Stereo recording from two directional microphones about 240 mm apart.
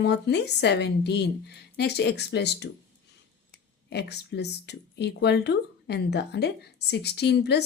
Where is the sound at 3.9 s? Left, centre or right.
Left.